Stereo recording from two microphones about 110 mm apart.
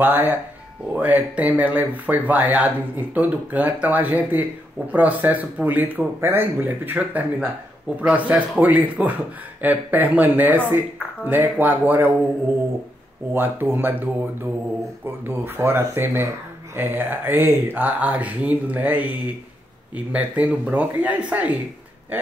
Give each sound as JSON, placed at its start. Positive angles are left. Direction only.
{"t": 0.0, "sound": "speech", "side_deg": -20}
{"t": 13.3, "sound": "speech", "side_deg": -20}